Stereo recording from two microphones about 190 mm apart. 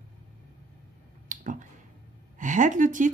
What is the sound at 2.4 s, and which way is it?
Speech, 40° right (ahead or behind).